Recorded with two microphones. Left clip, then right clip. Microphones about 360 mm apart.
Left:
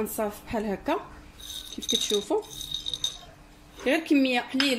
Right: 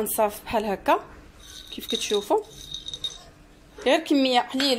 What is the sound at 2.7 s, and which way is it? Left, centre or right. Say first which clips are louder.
Rattle: left 2 dB; centre.